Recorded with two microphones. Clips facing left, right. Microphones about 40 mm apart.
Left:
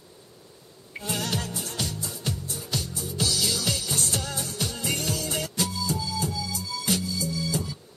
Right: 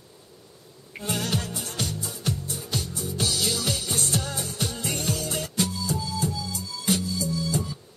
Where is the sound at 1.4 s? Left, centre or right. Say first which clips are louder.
Even; right.